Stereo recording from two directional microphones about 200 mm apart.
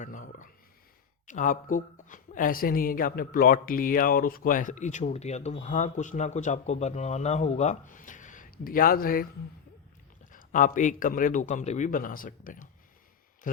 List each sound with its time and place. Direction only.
0.0 s a sound: 40° left (ahead or behind)
1.3 s speech: 40° left (ahead or behind)
10.3 s speech: 40° left (ahead or behind)